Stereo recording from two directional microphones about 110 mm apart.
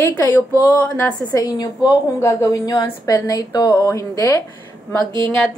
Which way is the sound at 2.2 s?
30° left (ahead or behind).